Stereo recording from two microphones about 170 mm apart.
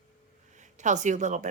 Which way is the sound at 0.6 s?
45° right (ahead or behind).